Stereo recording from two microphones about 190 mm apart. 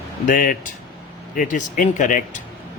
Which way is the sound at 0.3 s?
45° left (ahead or behind).